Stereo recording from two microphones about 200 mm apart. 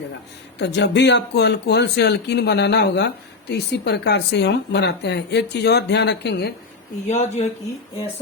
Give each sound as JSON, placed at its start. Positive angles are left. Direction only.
{"t": 0.6, "sound": "speech", "side_deg": 60}
{"t": 7.1, "sound": "speech", "side_deg": 35}